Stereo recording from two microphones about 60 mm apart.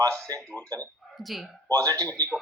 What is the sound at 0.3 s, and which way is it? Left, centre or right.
Speech, right.